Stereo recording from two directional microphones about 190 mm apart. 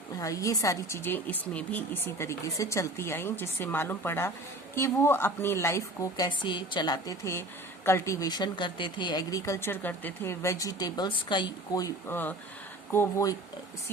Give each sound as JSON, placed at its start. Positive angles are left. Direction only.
{"t": 0.2, "sound": "speech", "side_deg": 15}